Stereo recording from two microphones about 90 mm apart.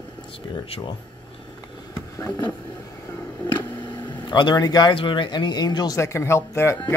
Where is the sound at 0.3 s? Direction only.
90° left.